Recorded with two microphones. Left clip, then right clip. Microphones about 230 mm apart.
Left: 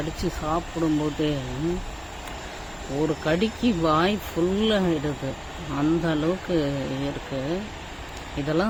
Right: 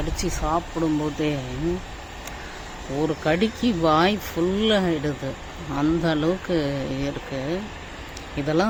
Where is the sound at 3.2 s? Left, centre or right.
Centre.